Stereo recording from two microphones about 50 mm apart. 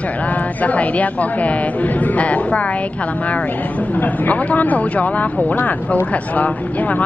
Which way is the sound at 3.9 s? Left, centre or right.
Left.